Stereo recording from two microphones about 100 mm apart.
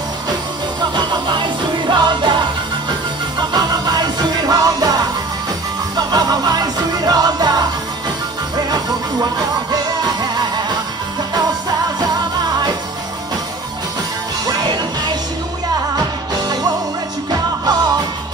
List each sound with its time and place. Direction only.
0.9 s music: 50° right (ahead or behind)
14.4 s music: 45° right (ahead or behind)
16.0 s music: 40° right (ahead or behind)